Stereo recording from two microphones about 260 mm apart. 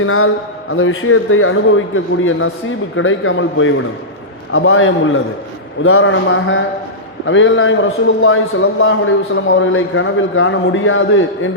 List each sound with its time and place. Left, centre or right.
0.0 s a man's voice: left